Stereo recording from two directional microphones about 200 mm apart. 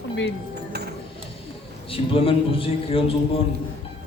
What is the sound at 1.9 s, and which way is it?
A man's voice, 25° left (ahead or behind).